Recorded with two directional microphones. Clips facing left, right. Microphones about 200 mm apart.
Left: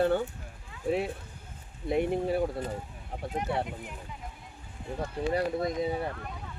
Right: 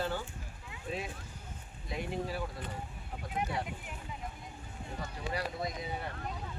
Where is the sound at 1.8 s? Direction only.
55° left (ahead or behind).